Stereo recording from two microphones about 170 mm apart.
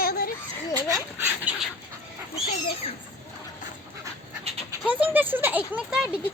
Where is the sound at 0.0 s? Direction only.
60° left (ahead or behind).